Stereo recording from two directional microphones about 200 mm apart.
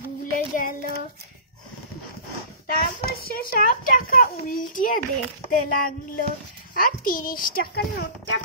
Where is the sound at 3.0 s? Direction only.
50° left (ahead or behind).